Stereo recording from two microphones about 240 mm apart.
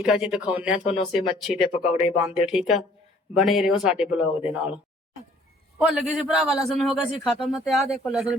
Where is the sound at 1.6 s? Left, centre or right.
Left.